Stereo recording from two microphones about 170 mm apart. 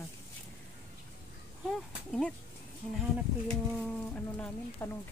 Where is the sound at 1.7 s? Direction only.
5° left (ahead or behind).